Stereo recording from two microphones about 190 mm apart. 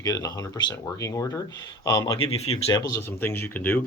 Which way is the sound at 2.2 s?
30° left (ahead or behind).